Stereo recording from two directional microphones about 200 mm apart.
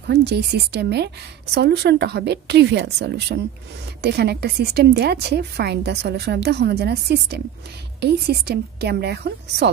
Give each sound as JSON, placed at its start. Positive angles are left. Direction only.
{"t": 0.1, "sound": "a woman's voice", "side_deg": -55}